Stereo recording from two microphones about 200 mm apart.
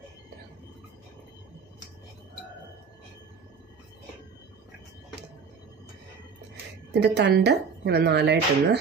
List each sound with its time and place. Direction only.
6.9 s speech: 60° right (ahead or behind)